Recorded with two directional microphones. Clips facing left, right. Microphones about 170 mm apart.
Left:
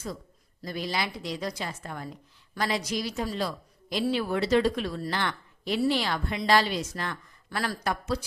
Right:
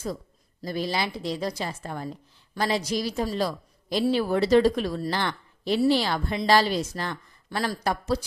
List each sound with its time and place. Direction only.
0.6 s a woman's voice: 35° right (ahead or behind)